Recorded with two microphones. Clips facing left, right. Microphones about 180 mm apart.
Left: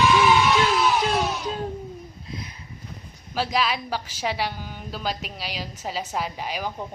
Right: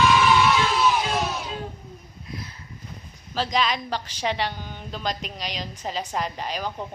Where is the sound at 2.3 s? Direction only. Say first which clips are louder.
Even; 20° left (ahead or behind).